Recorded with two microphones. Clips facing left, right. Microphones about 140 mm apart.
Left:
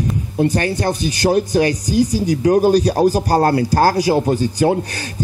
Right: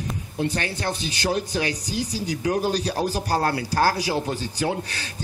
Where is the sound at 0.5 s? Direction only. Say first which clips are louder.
Left 9 dB; 50° left (ahead or behind).